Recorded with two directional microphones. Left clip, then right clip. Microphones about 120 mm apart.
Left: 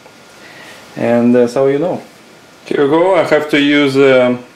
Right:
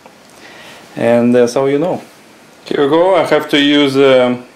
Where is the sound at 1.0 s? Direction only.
35° right (ahead or behind).